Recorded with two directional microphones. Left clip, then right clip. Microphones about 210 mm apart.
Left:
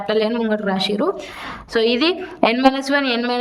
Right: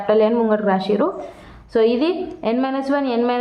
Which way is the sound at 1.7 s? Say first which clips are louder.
Even; 65° left (ahead or behind).